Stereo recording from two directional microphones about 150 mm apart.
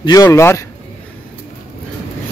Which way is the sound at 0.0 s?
25° left (ahead or behind).